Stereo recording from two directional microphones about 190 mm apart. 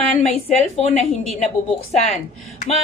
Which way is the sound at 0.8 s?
35° left (ahead or behind).